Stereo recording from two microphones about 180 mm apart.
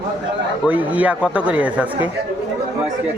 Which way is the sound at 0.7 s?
10° right (ahead or behind).